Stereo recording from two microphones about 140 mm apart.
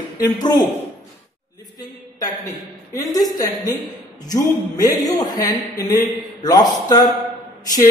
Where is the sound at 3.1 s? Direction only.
25° left (ahead or behind).